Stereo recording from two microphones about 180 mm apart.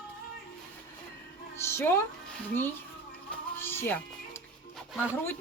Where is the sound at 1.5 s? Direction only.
15° left (ahead or behind).